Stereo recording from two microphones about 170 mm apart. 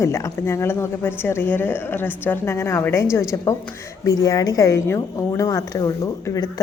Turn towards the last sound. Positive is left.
turn(degrees=20)  # may be behind; listen again after turning